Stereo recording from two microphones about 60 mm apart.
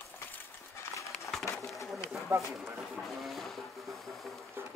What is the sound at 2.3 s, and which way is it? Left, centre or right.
Speech, right.